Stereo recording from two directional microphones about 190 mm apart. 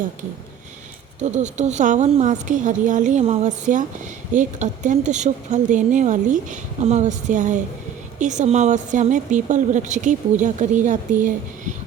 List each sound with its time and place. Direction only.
1.2 s a woman's voice: 40° right (ahead or behind)